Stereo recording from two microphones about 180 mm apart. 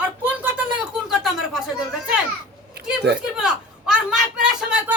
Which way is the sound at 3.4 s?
5° right (ahead or behind).